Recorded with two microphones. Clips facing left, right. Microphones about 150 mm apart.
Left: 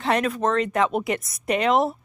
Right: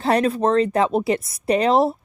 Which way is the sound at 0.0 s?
35° right (ahead or behind).